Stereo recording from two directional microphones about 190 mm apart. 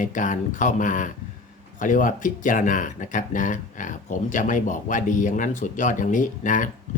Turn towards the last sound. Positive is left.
turn(degrees=45)  # may be behind; listen again after turning